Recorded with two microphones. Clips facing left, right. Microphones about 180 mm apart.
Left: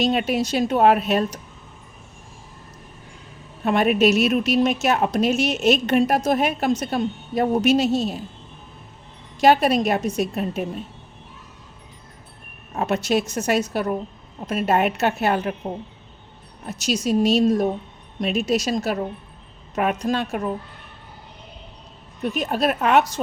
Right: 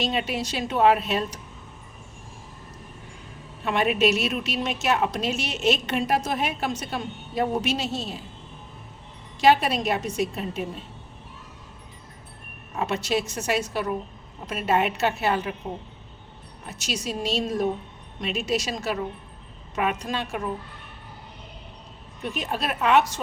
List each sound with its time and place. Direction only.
0.0 s a woman's voice: 45° left (ahead or behind)
3.6 s a woman's voice: 40° left (ahead or behind)
9.4 s a woman's voice: 45° left (ahead or behind)
12.7 s a woman's voice: 45° left (ahead or behind)
16.6 s a woman's voice: 40° left (ahead or behind)
22.2 s a woman's voice: 40° left (ahead or behind)